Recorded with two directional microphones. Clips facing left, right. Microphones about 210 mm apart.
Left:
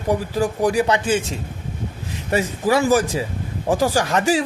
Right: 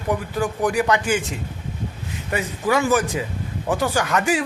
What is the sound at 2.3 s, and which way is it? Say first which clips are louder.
A man's voice: left 3 dB; 35° left (ahead or behind).